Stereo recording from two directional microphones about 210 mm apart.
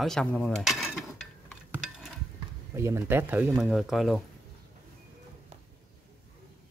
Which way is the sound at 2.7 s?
10° right (ahead or behind).